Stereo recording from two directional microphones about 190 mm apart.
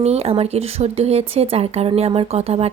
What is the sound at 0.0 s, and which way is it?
A woman's voice, 35° right (ahead or behind).